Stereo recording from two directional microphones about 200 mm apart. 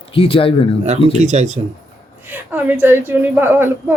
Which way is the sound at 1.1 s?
35° right (ahead or behind).